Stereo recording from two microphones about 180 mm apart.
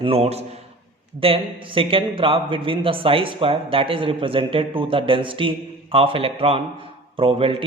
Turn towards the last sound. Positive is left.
turn(degrees=-30)  # may be behind; listen again after turning